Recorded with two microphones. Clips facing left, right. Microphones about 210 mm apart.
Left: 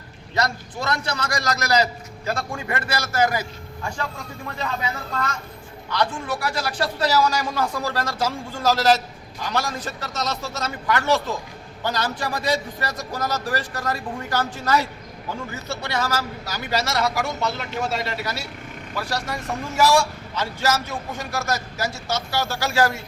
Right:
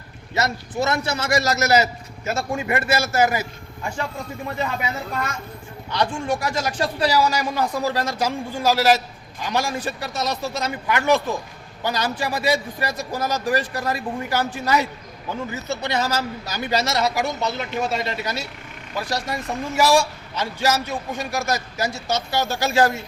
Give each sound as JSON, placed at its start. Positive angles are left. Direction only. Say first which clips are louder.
{"t": 0.3, "sound": "speech", "louder": "right 2 dB", "side_deg": -25}
{"t": 4.4, "sound": "a man's voice", "louder": "right 3 dB", "side_deg": -20}
{"t": 6.0, "sound": "a man's voice", "louder": "right 2 dB", "side_deg": -15}